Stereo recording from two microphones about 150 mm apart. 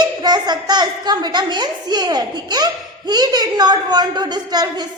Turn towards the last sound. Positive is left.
turn(degrees=-30)  # may be behind; listen again after turning